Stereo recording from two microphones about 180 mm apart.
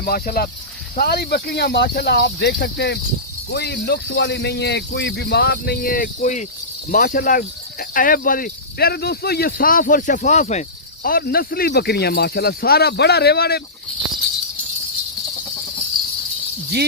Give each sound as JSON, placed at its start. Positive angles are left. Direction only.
{"t": 0.0, "sound": "a man's voice", "side_deg": 55}